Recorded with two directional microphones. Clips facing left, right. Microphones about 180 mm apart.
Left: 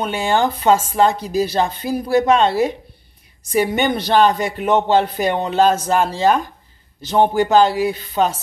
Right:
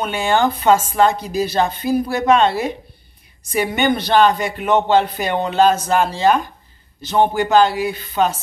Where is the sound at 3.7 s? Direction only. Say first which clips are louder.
Right 4 dB; 35° left (ahead or behind).